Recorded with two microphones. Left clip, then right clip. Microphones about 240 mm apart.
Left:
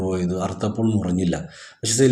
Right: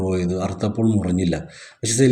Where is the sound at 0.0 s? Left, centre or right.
Right.